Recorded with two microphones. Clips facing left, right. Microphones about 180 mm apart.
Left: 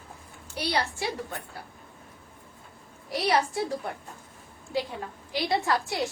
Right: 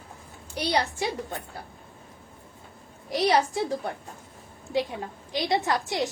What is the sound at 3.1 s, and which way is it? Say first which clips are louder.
Speech: right 3 dB; 20° right (ahead or behind).